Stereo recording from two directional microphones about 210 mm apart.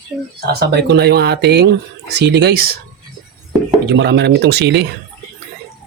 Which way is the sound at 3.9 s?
55° right (ahead or behind).